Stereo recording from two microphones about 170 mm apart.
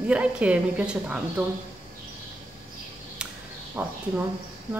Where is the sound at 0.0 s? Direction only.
5° right (ahead or behind).